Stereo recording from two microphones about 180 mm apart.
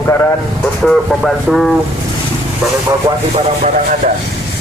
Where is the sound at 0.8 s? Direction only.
Centre (ahead or behind).